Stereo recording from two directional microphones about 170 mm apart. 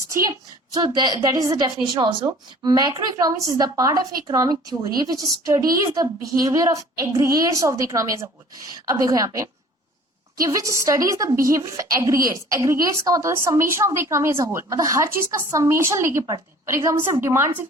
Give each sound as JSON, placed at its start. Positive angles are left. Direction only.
{"t": 0.0, "sound": "a woman's voice", "side_deg": -20}